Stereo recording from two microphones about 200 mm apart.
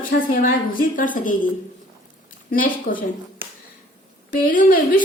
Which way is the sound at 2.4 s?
45° left (ahead or behind).